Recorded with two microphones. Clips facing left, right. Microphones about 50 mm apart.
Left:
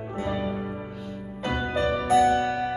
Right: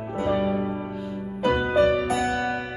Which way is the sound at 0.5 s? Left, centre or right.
Right.